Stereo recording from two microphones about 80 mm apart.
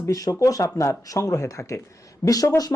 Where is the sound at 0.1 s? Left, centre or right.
Left.